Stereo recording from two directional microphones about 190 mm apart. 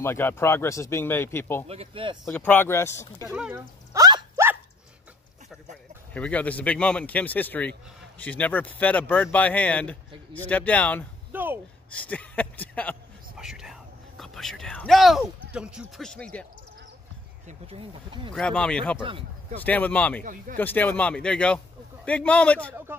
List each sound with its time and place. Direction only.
0.0 s speech: 10° left (ahead or behind)
1.7 s speech: 30° right (ahead or behind)
2.3 s speech: 10° left (ahead or behind)
3.3 s speech: 5° right (ahead or behind)
3.9 s dog: 20° right (ahead or behind)
6.1 s speech: 10° left (ahead or behind)
11.3 s speech: 10° right (ahead or behind)
11.9 s speech: 5° left (ahead or behind)
17.5 s speech: 30° right (ahead or behind)
18.3 s speech: 5° left (ahead or behind)
18.9 s speech: 25° right (ahead or behind)
19.5 s speech: 10° left (ahead or behind)